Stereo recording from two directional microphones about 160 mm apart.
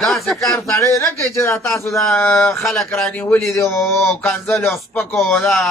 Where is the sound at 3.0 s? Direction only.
10° left (ahead or behind).